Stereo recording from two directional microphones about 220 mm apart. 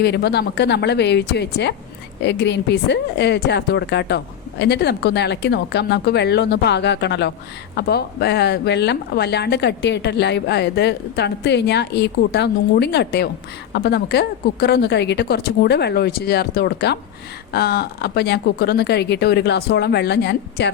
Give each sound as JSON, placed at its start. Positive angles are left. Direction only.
{"t": 0.0, "sound": "speech", "side_deg": 45}